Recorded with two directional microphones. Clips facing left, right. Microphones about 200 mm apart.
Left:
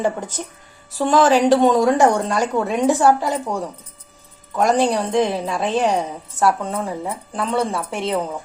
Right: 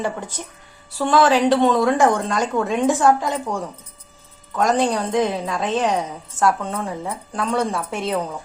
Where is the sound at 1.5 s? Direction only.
45° left (ahead or behind).